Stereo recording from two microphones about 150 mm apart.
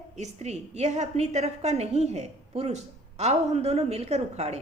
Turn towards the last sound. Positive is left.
turn(degrees=-45)  # may be behind; listen again after turning